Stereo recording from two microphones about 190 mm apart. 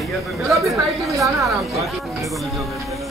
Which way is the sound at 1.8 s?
Centre (ahead or behind).